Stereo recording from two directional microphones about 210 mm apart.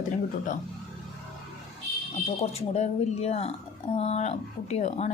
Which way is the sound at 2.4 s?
30° left (ahead or behind).